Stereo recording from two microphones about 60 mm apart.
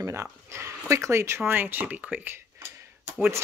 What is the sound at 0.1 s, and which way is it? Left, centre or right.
Speech, right.